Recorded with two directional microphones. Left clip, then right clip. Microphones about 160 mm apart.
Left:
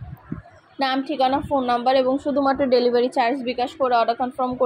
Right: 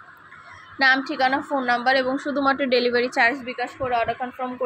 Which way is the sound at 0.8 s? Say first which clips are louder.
Right 2 dB; 35° left (ahead or behind).